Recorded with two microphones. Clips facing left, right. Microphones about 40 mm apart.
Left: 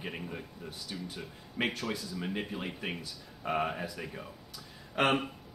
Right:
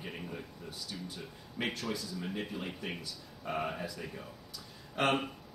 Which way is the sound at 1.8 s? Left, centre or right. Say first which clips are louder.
Left 2 dB; left.